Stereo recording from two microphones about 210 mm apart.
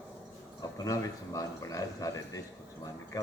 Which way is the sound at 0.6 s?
15° left (ahead or behind).